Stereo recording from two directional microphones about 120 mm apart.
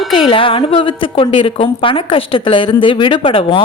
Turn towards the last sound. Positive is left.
turn(degrees=45)  # may be behind; listen again after turning